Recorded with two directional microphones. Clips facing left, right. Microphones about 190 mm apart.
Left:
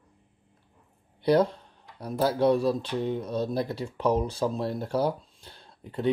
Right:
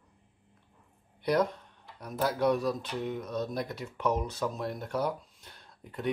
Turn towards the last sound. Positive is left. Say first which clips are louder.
# left 6 dB
turn(degrees=30)  # may be behind; listen again after turning